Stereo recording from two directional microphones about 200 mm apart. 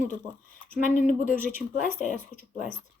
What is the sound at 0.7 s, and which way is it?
Speech, 40° left (ahead or behind).